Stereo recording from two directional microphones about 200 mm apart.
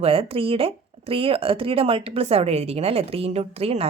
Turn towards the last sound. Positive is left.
turn(degrees=-30)  # may be behind; listen again after turning